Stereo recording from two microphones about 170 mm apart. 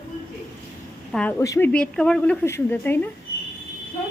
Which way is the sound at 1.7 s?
5° left (ahead or behind).